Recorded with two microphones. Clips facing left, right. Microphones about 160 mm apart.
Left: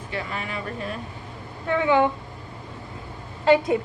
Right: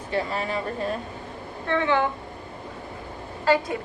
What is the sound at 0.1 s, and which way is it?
Speech, 35° right (ahead or behind).